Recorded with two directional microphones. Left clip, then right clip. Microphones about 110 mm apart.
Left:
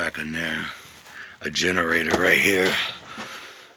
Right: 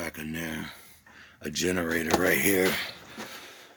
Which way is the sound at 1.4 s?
35° right (ahead or behind).